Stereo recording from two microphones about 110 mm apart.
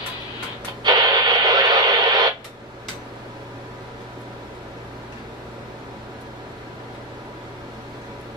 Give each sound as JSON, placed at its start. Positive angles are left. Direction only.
{"t": 0.8, "sound": "radio", "side_deg": -40}